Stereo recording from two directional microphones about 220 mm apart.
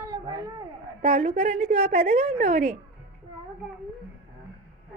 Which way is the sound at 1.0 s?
35° right (ahead or behind).